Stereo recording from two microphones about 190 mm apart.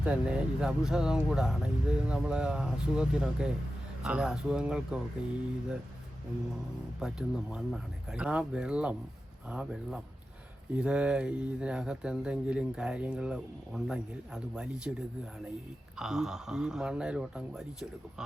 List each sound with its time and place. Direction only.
0.0 s speech: 5° right (ahead or behind)
7.0 s speech: 5° right (ahead or behind)
16.0 s speech: 5° right (ahead or behind)